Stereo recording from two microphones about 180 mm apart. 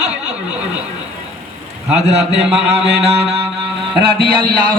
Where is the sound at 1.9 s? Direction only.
35° right (ahead or behind).